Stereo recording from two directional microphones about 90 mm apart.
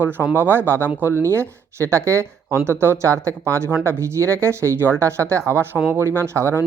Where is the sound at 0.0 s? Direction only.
25° right (ahead or behind).